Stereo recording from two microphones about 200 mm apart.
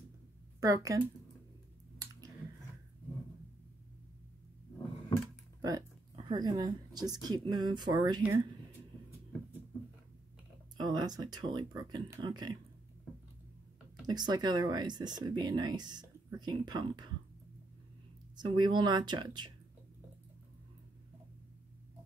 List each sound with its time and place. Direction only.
0.6 s speech: 20° right (ahead or behind)
5.6 s a woman's voice: 20° right (ahead or behind)
10.8 s speech: 20° right (ahead or behind)
14.0 s speech: 20° right (ahead or behind)
18.3 s speech: 20° right (ahead or behind)